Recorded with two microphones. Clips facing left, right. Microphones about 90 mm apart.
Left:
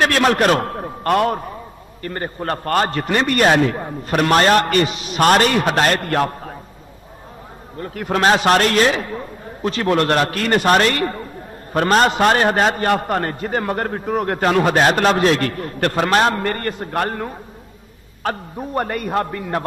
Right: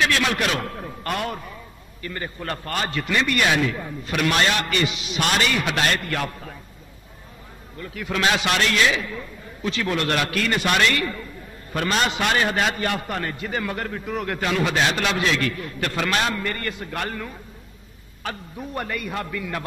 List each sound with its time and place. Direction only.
0.0 s a man's voice: 45° left (ahead or behind)
7.7 s a man's voice: 45° left (ahead or behind)